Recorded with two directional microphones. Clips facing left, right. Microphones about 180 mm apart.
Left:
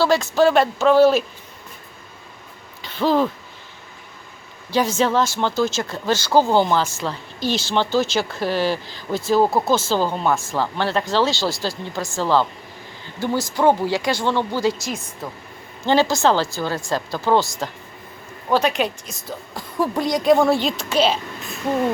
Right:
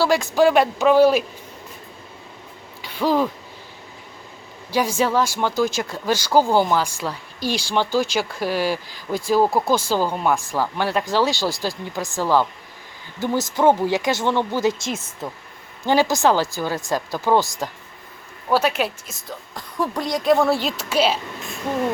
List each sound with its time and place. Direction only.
0.0 s speech: 15° right (ahead or behind)
2.8 s speech: 10° right (ahead or behind)
4.7 s speech: 10° right (ahead or behind)
15.9 s a woman's voice: 15° right (ahead or behind)